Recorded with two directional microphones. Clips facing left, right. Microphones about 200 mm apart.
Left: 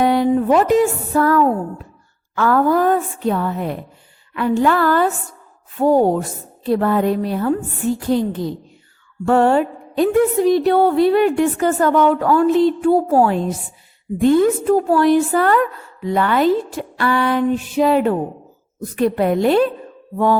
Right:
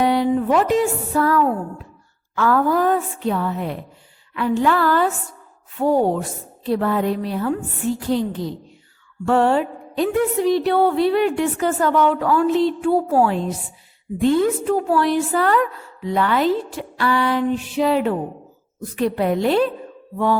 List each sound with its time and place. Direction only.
0.0 s speech: 50° left (ahead or behind)